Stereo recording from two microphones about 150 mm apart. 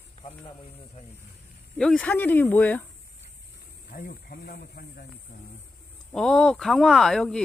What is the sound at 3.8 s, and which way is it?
Speech, 85° left.